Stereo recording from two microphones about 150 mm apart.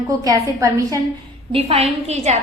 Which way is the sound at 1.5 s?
40° right (ahead or behind).